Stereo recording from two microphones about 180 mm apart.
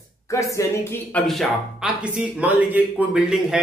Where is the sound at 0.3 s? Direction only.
15° left (ahead or behind).